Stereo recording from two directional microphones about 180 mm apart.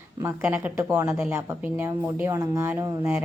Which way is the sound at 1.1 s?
5° right (ahead or behind).